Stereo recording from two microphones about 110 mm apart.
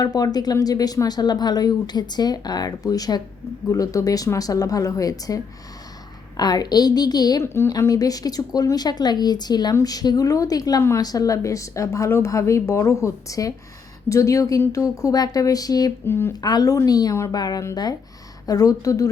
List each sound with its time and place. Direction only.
0.0 s speech: 35° left (ahead or behind)
7.4 s speech: 20° left (ahead or behind)
7.7 s speech: 30° left (ahead or behind)
16.0 s speech: 20° left (ahead or behind)
16.4 s speech: 35° left (ahead or behind)